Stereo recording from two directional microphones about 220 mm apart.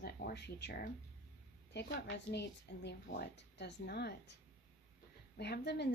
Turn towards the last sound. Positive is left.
turn(degrees=50)  # may be behind; listen again after turning